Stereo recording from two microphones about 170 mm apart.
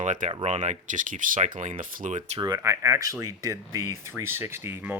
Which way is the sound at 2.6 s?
15° right (ahead or behind).